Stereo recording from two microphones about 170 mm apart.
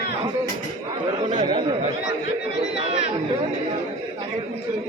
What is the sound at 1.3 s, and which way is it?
Speech, 30° right (ahead or behind).